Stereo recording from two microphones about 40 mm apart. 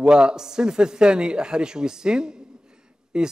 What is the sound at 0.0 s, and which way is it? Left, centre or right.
A man's voice, right.